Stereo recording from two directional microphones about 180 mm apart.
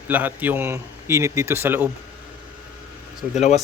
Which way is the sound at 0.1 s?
10° right (ahead or behind).